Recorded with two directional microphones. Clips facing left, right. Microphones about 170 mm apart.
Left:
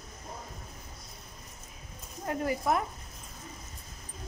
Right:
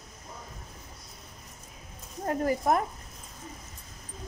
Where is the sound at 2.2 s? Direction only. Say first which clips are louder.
Right 3 dB; 45° right (ahead or behind).